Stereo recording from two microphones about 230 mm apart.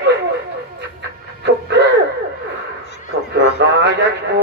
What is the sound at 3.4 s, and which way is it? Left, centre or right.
Speech, right.